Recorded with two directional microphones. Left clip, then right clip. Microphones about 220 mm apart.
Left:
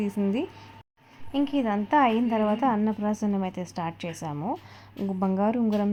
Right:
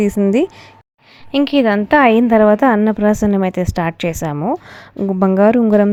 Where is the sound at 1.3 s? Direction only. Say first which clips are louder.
Right 13 dB; 35° right (ahead or behind).